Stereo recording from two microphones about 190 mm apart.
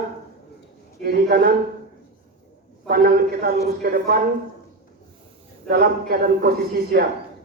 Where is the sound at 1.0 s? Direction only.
55° right (ahead or behind).